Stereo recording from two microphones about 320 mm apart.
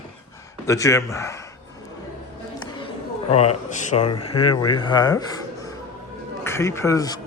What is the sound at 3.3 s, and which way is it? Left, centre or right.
A man's voice, centre.